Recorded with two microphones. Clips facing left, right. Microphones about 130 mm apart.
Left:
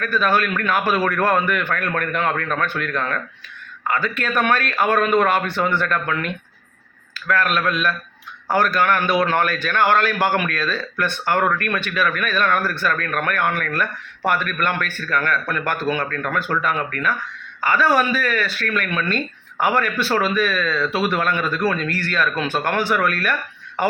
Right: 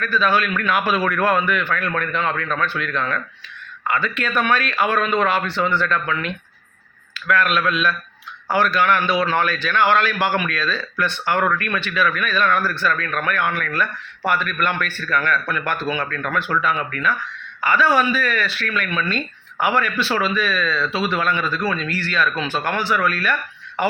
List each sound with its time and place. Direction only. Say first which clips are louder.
0.1 s a man's voice: even; 50° left (ahead or behind)